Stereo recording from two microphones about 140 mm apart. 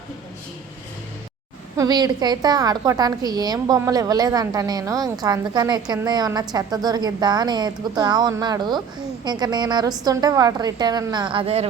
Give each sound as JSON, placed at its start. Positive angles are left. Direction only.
{"t": 1.7, "sound": "a woman's voice", "side_deg": -25}